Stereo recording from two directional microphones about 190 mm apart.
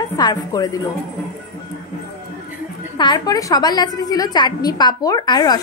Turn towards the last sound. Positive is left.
turn(degrees=20)  # may be behind; listen again after turning